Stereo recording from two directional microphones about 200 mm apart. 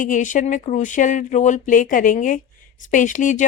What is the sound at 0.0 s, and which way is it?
Speech, 40° left (ahead or behind).